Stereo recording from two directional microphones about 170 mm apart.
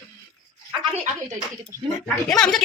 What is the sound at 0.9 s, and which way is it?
Speech, 45° right (ahead or behind).